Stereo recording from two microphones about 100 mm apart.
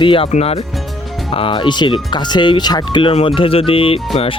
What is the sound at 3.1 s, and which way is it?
Music, 60° left (ahead or behind).